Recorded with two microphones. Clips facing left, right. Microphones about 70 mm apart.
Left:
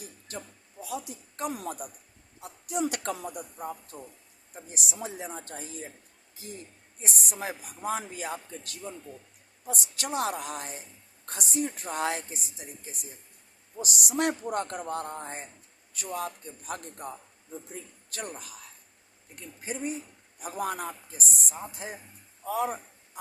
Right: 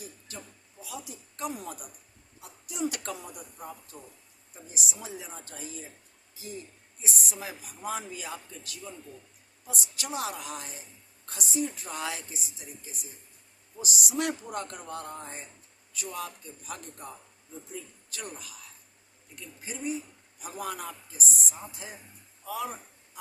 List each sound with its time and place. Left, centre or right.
0.0 s music: left
1.6 s speech: left
2.4 s a sound: left
2.9 s speech: left
3.6 s speech: centre
4.5 s speech: left
11.3 s a man's voice: left